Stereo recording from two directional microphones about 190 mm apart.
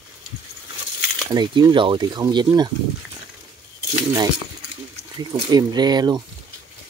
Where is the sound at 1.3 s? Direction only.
20° right (ahead or behind).